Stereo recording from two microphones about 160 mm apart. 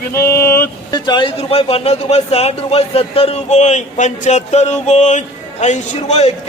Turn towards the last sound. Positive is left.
turn(degrees=45)  # may be behind; listen again after turning